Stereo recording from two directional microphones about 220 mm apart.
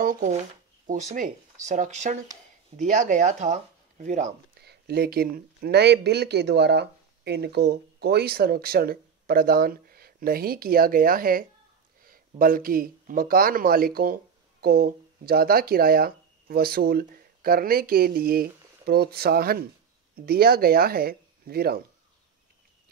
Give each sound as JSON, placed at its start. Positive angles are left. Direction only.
{"t": 0.0, "sound": "speech", "side_deg": -35}
{"t": 4.6, "sound": "speech", "side_deg": -45}